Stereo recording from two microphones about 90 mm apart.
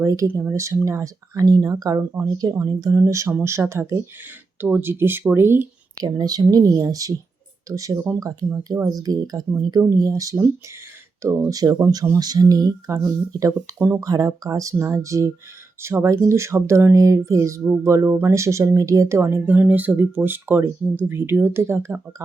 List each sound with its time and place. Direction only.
0.0 s speech: 35° right (ahead or behind)
2.6 s speech: 35° right (ahead or behind)
6.0 s speech: 45° right (ahead or behind)
9.0 s speech: 45° right (ahead or behind)
11.4 s speech: 45° right (ahead or behind); by 21.9 s 30° right (ahead or behind)